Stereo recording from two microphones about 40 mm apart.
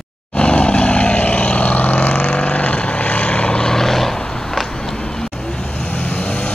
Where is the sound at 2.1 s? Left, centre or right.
Left; by 5.2 s centre.